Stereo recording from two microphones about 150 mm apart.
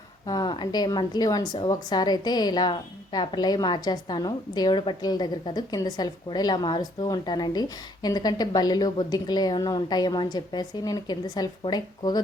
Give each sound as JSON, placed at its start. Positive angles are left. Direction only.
{"t": 0.3, "sound": "a woman's voice", "side_deg": 30}